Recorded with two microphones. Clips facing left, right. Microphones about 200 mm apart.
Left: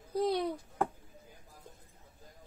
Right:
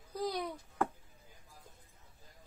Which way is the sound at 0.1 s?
30° left (ahead or behind).